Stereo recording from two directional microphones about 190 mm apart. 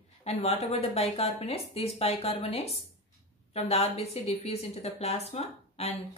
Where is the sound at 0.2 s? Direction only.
35° left (ahead or behind).